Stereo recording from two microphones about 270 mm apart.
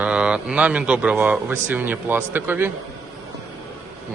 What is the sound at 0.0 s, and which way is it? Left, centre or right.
Speech, centre.